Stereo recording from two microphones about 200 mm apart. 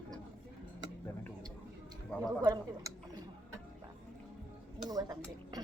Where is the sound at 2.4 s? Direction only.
20° right (ahead or behind).